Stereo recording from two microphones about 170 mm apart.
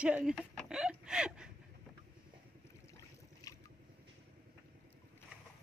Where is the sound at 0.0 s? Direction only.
5° right (ahead or behind).